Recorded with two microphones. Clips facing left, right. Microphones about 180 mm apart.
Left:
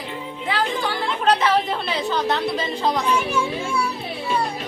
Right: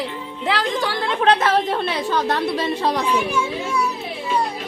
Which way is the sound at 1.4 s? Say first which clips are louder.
Right 2 dB; 45° right (ahead or behind).